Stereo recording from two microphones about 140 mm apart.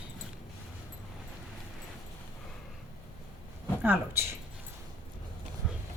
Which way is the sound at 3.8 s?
15° right (ahead or behind).